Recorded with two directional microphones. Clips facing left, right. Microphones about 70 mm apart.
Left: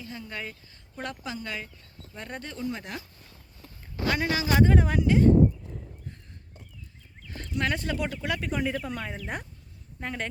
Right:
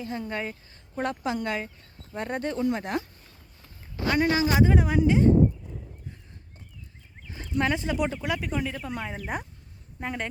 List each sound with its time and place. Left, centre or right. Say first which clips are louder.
0.0 s speech: right 6 dB; right
2.6 s speech: right 5 dB; right
4.3 s speech: even; right
4.6 s speech: even; centre
4.9 s speech: right 2 dB; right
7.2 s a sound: even; centre
7.6 s speech: right 3 dB; centre
8.4 s speech: left 1 dB; centre